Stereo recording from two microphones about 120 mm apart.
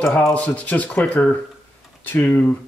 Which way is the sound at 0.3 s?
10° left (ahead or behind).